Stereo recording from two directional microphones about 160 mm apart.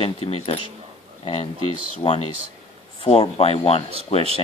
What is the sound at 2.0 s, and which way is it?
Speech, 30° left (ahead or behind).